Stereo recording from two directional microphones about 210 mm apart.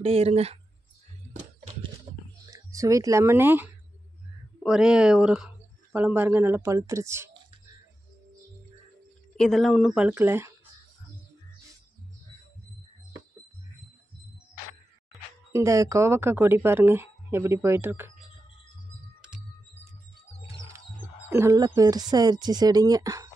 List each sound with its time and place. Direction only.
0.0 s speech: 30° right (ahead or behind)
1.3 s a sound: 30° right (ahead or behind)
2.5 s speech: 15° right (ahead or behind)
9.4 s speech: centre (ahead or behind)
15.5 s speech: 15° right (ahead or behind)
20.5 s music: 15° right (ahead or behind)
21.3 s speech: 10° right (ahead or behind)